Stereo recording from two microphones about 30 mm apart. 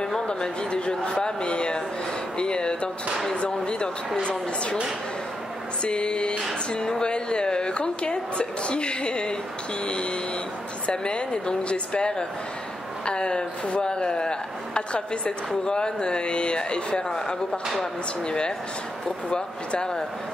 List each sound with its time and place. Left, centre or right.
0.3 s a woman's voice: left
5.9 s a woman's voice: left
18.2 s a woman's voice: left